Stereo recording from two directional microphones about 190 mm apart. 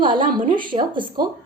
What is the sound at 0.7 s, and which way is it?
Speech, 25° right (ahead or behind).